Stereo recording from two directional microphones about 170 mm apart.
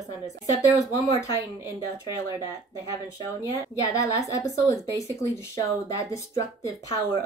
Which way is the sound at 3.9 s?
20° left (ahead or behind).